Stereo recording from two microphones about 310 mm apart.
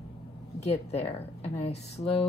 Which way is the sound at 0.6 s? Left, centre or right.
Left.